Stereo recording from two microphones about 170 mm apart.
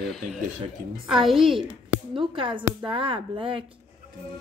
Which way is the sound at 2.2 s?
30° right (ahead or behind).